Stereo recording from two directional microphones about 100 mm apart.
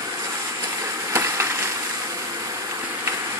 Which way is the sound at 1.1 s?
25° right (ahead or behind).